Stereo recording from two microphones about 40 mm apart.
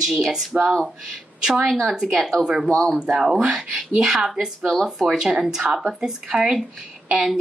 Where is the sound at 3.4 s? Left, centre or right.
Right.